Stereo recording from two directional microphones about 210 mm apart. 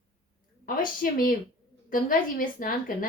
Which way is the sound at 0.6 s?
45° left (ahead or behind).